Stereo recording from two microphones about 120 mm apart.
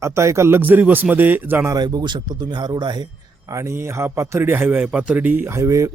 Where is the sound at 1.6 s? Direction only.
35° right (ahead or behind).